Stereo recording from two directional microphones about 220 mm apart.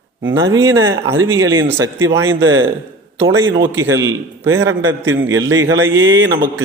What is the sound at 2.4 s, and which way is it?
Speech, 60° right (ahead or behind).